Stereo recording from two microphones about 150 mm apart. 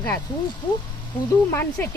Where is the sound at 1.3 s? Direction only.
15° left (ahead or behind).